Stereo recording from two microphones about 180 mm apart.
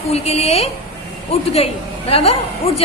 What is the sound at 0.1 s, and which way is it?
A woman's voice, 35° left (ahead or behind).